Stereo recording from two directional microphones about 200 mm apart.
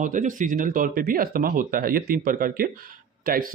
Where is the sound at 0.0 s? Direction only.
40° right (ahead or behind).